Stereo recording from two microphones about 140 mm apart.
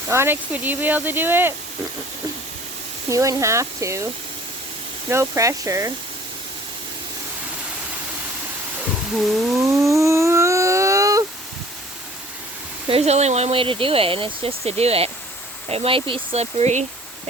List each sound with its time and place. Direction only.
0.1 s speech: 15° right (ahead or behind)
3.1 s speech: 20° right (ahead or behind)
5.0 s speech: 20° right (ahead or behind)
9.6 s a sound: 20° right (ahead or behind)
12.9 s speech: 50° right (ahead or behind)